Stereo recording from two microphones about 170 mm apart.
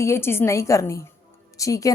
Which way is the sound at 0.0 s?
15° left (ahead or behind).